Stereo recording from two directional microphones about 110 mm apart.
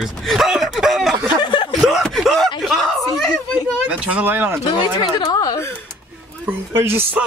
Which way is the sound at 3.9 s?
15° right (ahead or behind).